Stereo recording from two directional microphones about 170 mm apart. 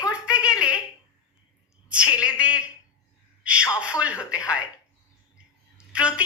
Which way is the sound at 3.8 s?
5° right (ahead or behind).